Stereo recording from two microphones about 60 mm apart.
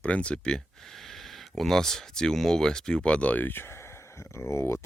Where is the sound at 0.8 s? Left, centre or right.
Centre.